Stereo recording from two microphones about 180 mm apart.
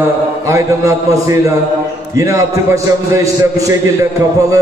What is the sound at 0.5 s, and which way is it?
A man's voice, 15° right (ahead or behind).